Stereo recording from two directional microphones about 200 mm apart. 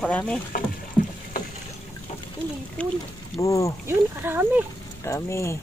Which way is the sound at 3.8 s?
10° right (ahead or behind).